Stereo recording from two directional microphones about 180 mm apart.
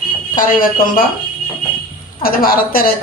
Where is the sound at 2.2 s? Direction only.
55° left (ahead or behind).